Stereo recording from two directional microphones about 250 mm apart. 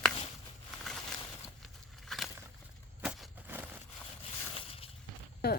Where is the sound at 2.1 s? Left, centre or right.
Centre.